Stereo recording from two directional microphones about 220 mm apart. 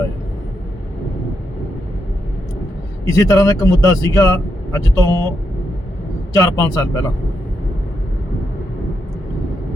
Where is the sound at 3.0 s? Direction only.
15° left (ahead or behind).